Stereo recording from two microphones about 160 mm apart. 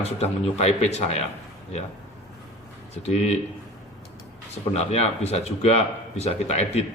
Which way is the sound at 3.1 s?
45° left (ahead or behind).